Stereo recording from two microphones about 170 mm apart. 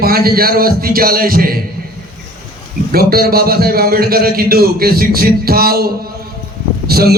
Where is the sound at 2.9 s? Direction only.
65° right (ahead or behind).